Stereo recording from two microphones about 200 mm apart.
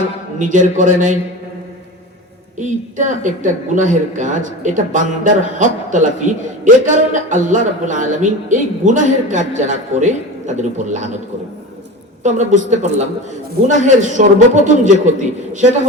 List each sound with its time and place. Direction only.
0.3 s speech: 40° right (ahead or behind)
2.6 s speech: 40° right (ahead or behind)
12.2 s speech: 35° right (ahead or behind)